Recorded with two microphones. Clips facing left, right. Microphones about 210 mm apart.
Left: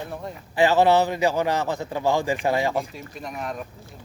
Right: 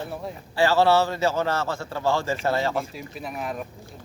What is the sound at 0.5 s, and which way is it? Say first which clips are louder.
Speech: left 2 dB; 20° left (ahead or behind).